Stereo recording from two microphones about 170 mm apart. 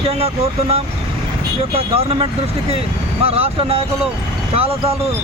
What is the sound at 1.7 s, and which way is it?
Speech, 35° right (ahead or behind).